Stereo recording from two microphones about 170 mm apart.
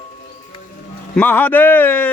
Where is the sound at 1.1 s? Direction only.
10° left (ahead or behind).